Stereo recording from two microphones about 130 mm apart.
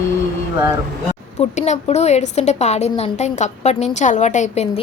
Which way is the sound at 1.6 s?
55° left (ahead or behind).